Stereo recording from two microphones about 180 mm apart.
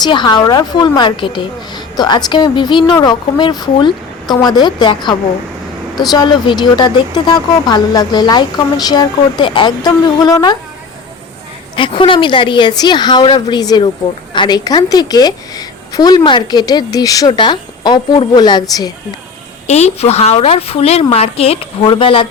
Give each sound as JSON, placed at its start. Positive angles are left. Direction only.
{"t": 0.0, "sound": "a woman's voice", "side_deg": 25}
{"t": 6.0, "sound": "a woman's voice", "side_deg": 20}
{"t": 11.8, "sound": "a woman's voice", "side_deg": 30}
{"t": 19.6, "sound": "a woman's voice", "side_deg": 35}